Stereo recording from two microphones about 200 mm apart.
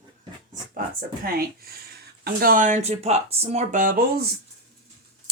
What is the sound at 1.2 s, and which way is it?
Speech, 50° right (ahead or behind).